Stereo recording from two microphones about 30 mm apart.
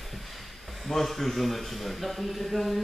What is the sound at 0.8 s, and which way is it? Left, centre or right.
A man's voice, centre.